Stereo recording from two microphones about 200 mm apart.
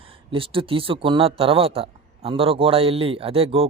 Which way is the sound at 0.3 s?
25° right (ahead or behind).